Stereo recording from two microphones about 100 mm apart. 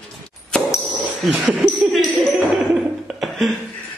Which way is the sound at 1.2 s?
Centre (ahead or behind).